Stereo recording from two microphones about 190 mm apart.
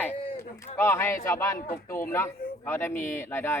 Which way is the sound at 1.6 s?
50° left (ahead or behind).